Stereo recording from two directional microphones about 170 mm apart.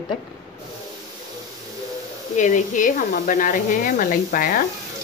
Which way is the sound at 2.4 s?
45° left (ahead or behind).